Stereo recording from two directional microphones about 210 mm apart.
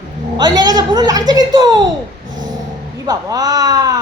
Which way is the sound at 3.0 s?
15° right (ahead or behind).